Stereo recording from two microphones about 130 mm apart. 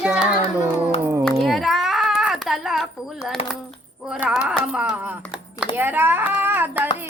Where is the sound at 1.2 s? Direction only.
Centre (ahead or behind).